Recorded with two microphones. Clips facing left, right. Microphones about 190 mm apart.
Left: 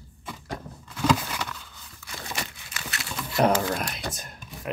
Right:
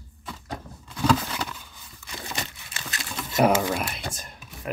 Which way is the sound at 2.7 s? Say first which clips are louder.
Left 1 dB; 30° right (ahead or behind).